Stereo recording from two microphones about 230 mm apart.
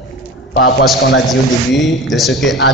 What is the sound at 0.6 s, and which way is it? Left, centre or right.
Speech, left.